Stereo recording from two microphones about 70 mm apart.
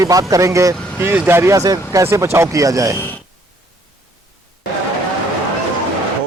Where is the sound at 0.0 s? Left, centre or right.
Right.